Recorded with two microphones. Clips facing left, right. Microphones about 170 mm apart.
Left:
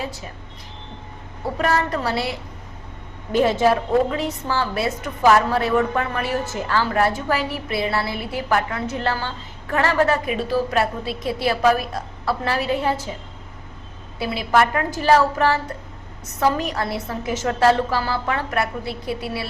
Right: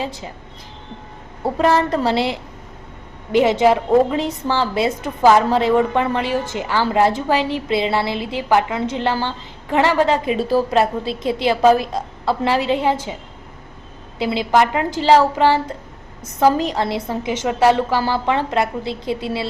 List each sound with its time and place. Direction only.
1.5 s a woman's voice: 30° right (ahead or behind)
3.6 s a woman's voice: 20° right (ahead or behind)
14.2 s a woman's voice: 25° right (ahead or behind)
16.4 s a woman's voice: 35° right (ahead or behind)
16.7 s a woman's voice: 20° right (ahead or behind)